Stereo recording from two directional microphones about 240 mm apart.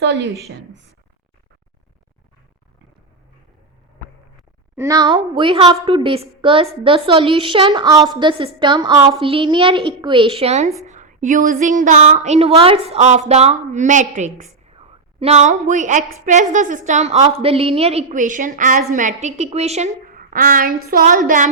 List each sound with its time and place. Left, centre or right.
0.0 s a woman's voice: right
4.8 s a woman's voice: centre; by 21.5 s right